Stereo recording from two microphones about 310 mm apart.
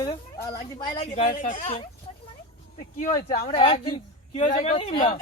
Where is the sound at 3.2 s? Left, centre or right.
Centre.